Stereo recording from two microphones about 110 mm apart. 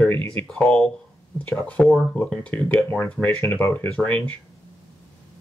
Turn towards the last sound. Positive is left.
turn(degrees=15)  # may be behind; listen again after turning